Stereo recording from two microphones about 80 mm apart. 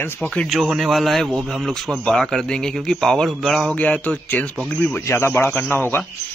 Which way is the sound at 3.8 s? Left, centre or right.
Centre.